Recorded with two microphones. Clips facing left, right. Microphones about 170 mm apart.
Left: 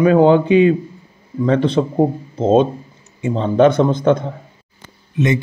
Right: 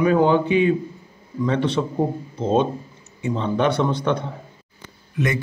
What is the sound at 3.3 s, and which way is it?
Speech, 40° left (ahead or behind).